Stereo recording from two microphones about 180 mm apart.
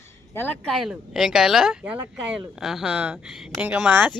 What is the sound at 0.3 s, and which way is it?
Speech, 5° left (ahead or behind).